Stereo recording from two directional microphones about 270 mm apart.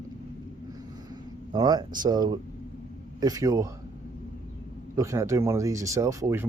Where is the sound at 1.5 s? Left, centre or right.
Centre.